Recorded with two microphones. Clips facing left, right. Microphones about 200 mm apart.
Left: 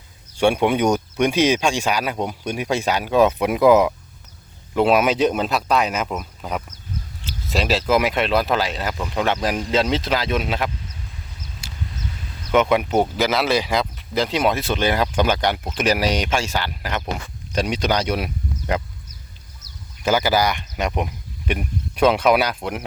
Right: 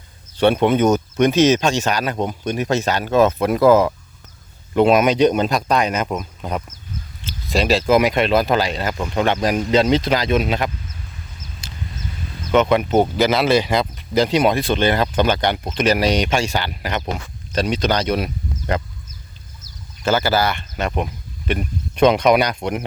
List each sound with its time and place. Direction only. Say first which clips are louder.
0.3 s speech: right 2 dB; 10° left (ahead or behind)
4.7 s speech: right 3 dB; 5° left (ahead or behind)
7.5 s speech: right 4 dB; 5° left (ahead or behind)
11.6 s a sound: right 2 dB; 10° left (ahead or behind)
12.5 s speech: right 2 dB; 10° left (ahead or behind)
17.5 s speech: right 2 dB; 10° left (ahead or behind)
20.1 s speech: right 1 dB; 15° left (ahead or behind)